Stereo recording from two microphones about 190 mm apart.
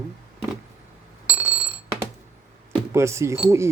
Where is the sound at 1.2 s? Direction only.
10° right (ahead or behind).